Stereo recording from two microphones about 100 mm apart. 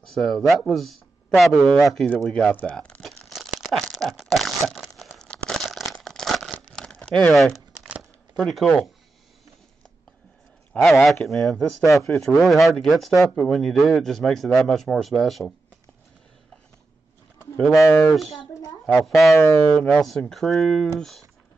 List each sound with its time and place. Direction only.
0.0 s speech: 5° left (ahead or behind)
2.5 s crumpling: 15° left (ahead or behind)
8.0 s a sound: centre (ahead or behind)
10.7 s speech: 10° left (ahead or behind)
17.6 s speech: 5° left (ahead or behind)
17.8 s speech: 20° left (ahead or behind)
18.4 s a sound: 40° left (ahead or behind)
18.9 s speech: centre (ahead or behind)
19.7 s speech: 15° left (ahead or behind)